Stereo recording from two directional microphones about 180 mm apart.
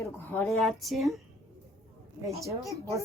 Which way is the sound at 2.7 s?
15° right (ahead or behind).